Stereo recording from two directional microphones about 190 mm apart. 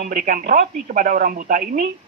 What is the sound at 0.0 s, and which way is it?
A man's voice, 45° right (ahead or behind).